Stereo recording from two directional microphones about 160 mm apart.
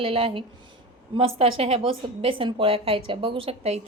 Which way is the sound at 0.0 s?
35° right (ahead or behind).